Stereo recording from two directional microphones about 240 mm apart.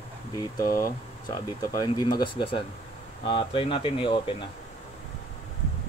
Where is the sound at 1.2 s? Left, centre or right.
Centre.